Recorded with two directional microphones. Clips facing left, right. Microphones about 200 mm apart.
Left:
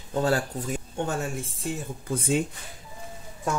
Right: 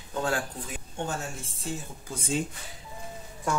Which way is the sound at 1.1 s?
60° left (ahead or behind).